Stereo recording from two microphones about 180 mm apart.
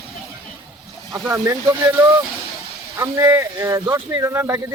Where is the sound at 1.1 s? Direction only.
15° right (ahead or behind).